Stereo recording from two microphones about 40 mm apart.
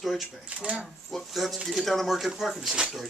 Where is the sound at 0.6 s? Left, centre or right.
Right.